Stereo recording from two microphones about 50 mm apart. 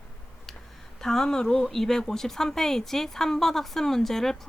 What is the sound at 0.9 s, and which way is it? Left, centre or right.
A woman's voice, centre.